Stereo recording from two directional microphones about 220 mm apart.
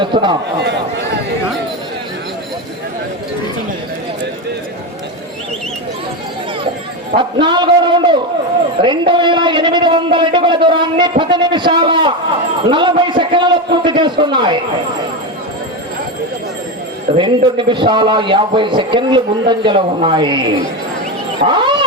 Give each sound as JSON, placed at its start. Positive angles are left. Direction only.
{"t": 0.0, "sound": "a man's voice", "side_deg": -20}
{"t": 7.2, "sound": "a man's voice", "side_deg": -20}
{"t": 17.2, "sound": "a man's voice", "side_deg": -20}
{"t": 21.4, "sound": "speech", "side_deg": -20}